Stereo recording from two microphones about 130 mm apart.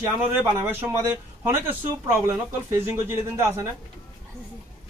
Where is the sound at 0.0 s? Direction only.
20° right (ahead or behind).